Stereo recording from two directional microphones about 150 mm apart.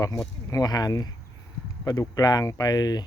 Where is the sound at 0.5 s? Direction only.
25° left (ahead or behind).